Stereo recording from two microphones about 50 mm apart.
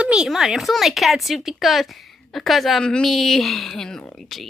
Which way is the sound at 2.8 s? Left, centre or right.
Centre.